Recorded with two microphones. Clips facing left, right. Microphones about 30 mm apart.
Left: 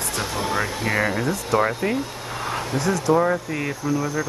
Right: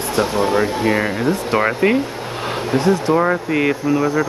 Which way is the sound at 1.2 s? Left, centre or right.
Right.